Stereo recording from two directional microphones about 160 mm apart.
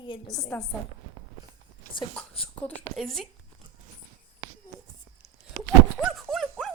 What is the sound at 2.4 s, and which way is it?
Speech, 10° left (ahead or behind).